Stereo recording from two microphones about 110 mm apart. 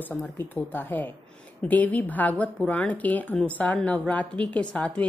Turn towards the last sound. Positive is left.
turn(degrees=10)  # may be behind; listen again after turning